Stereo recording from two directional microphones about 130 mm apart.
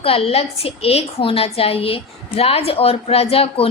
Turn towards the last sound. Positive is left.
turn(degrees=50)  # may be behind; listen again after turning